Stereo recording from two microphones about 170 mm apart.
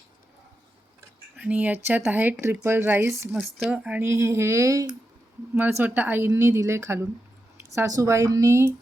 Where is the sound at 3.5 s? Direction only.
Centre (ahead or behind).